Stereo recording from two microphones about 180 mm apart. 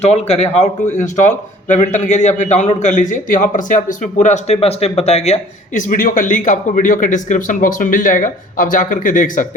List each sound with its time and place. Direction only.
0.0 s speech: 35° left (ahead or behind)